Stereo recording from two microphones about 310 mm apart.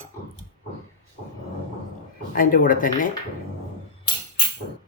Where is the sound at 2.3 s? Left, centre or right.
Left.